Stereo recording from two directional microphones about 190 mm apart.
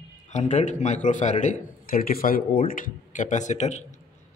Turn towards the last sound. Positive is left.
turn(degrees=35)  # may be behind; listen again after turning